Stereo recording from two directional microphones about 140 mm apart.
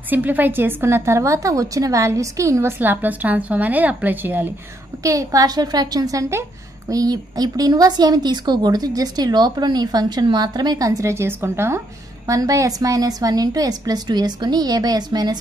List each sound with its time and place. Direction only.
0.1 s a woman's voice: 10° right (ahead or behind)
5.0 s speech: 25° right (ahead or behind)